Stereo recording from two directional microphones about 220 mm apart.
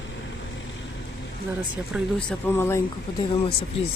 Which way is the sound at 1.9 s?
5° left (ahead or behind).